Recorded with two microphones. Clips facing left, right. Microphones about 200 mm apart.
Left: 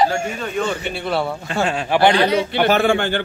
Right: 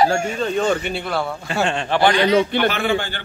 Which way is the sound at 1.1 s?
5° left (ahead or behind).